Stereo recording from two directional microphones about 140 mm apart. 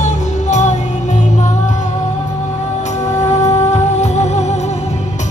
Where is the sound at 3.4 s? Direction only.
50° left (ahead or behind).